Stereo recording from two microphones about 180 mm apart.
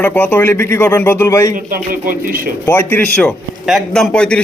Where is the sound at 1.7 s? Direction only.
50° right (ahead or behind).